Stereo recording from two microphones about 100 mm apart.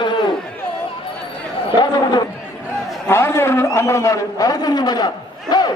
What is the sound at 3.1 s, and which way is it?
A man's voice, 25° left (ahead or behind).